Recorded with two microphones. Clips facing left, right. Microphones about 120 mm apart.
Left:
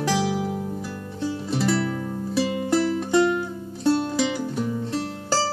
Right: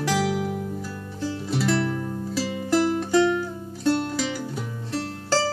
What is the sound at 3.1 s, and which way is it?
Music, 15° left (ahead or behind).